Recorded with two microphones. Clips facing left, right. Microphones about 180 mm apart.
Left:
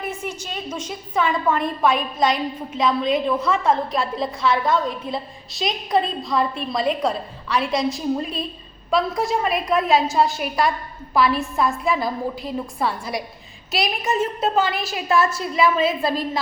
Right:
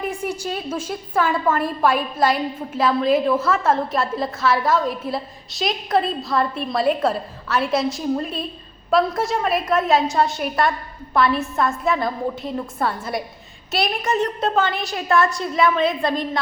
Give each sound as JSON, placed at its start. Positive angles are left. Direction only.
{"t": 0.0, "sound": "a woman's voice", "side_deg": -15}